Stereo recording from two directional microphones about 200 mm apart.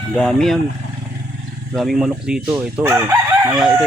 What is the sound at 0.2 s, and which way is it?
Chicken, 5° left (ahead or behind).